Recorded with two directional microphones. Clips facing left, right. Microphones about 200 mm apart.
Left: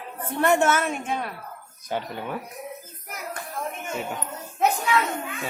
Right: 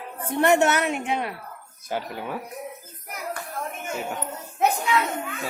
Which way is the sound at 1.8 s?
5° right (ahead or behind).